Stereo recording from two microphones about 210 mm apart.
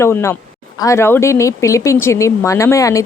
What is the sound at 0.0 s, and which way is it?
Speech, 10° left (ahead or behind).